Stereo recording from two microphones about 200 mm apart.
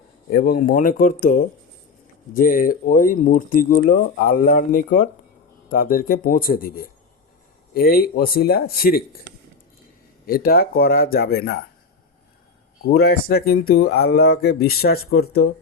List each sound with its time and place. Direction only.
0.3 s speech: 45° left (ahead or behind)
10.2 s speech: 50° left (ahead or behind)
12.8 s speech: 50° left (ahead or behind)